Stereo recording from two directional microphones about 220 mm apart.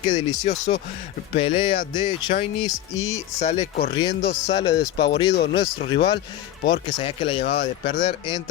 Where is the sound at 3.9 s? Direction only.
20° left (ahead or behind).